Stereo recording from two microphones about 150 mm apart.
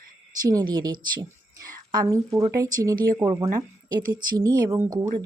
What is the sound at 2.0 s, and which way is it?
Speech, 25° right (ahead or behind).